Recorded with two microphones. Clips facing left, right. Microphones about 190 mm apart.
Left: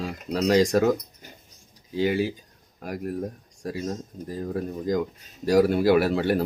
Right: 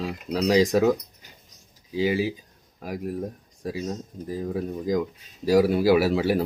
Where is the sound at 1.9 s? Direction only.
Centre (ahead or behind).